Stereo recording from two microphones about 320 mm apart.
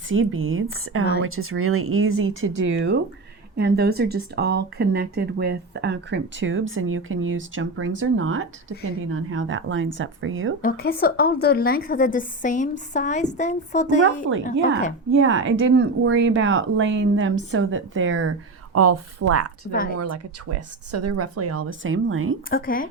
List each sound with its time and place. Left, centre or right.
0.1 s speech: right
10.6 s a woman's voice: left
15.1 s speech: right
19.7 s a woman's voice: left
20.5 s speech: right
22.4 s a woman's voice: left